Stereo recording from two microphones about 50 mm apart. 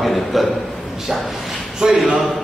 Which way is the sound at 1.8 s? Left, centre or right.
Centre.